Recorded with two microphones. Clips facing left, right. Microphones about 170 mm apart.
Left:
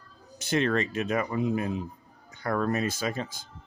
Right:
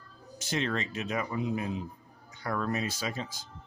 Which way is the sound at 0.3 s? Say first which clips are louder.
Left 6 dB; 60° left (ahead or behind).